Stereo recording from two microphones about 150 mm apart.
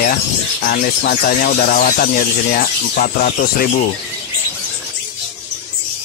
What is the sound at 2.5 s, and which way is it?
Speech, 65° left (ahead or behind).